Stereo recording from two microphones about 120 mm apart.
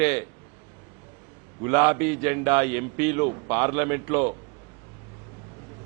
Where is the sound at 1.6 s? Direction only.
20° right (ahead or behind).